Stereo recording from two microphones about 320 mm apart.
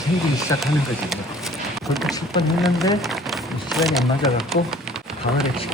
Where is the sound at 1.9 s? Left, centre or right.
Centre.